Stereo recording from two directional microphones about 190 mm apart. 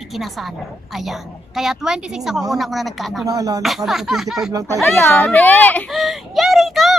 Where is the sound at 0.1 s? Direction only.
Centre (ahead or behind).